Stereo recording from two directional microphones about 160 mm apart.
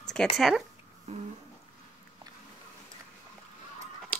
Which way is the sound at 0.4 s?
Centre (ahead or behind).